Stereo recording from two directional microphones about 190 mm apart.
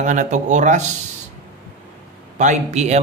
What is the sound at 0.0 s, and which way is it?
Speech, 40° right (ahead or behind).